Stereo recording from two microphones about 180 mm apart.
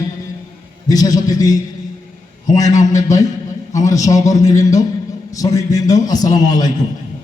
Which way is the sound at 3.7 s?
20° left (ahead or behind).